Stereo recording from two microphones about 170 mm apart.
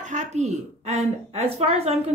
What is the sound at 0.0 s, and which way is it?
Speech, 45° right (ahead or behind).